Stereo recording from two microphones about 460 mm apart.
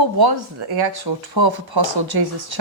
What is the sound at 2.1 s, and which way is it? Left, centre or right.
Speech, right.